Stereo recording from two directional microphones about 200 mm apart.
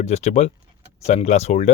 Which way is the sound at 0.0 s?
35° left (ahead or behind).